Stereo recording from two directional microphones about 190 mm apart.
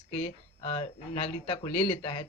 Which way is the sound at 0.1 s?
30° left (ahead or behind).